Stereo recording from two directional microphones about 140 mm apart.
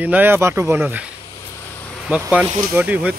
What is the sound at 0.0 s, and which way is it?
Speech, 15° right (ahead or behind).